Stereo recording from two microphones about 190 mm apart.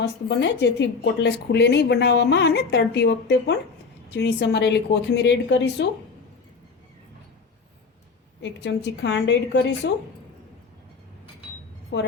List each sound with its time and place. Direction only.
0.0 s a woman's voice: 65° left (ahead or behind)
8.4 s a woman's voice: 65° left (ahead or behind)
11.9 s a woman's voice: 70° left (ahead or behind)